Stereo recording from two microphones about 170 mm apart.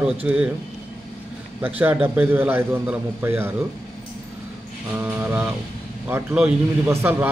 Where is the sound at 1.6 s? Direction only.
10° right (ahead or behind).